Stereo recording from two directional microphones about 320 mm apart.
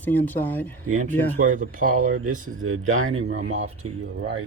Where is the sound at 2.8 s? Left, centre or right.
Right.